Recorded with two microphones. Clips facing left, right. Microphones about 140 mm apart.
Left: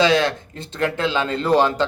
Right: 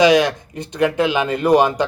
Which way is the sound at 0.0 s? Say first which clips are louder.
Right 4 dB; 15° right (ahead or behind).